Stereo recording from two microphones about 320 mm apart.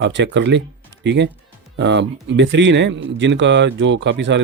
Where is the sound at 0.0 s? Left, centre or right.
Right.